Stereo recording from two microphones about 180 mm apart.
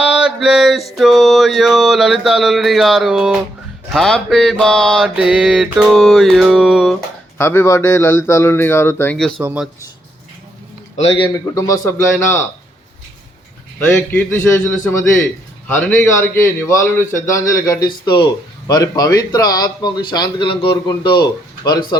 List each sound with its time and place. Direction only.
0.0 s mantra: 5° right (ahead or behind)
7.3 s a man's voice: 15° left (ahead or behind)
9.4 s speech: 10° right (ahead or behind)
11.5 s a man's voice: 20° left (ahead or behind)
13.7 s a man's voice: 10° left (ahead or behind)